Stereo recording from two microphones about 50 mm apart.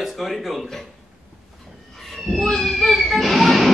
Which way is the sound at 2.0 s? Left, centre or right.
Centre.